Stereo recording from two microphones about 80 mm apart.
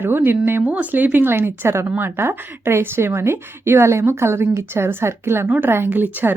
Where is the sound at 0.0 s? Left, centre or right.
Right.